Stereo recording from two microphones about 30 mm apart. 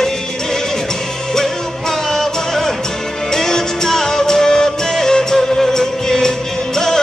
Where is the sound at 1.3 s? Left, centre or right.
Centre.